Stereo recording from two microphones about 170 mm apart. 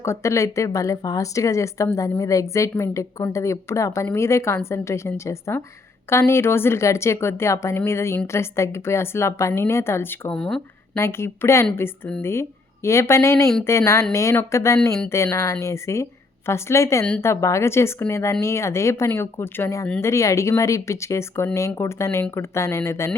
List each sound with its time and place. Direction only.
0.0 s speech: 15° left (ahead or behind)
10.9 s speech: 15° left (ahead or behind)
14.8 s speech: 5° left (ahead or behind)
15.1 s speech: 15° left (ahead or behind)